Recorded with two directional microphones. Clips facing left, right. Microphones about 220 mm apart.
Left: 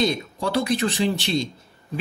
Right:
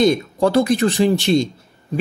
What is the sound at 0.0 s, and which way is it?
Speech, 45° right (ahead or behind).